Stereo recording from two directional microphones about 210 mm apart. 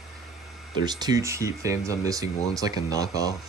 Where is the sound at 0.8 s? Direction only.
20° right (ahead or behind).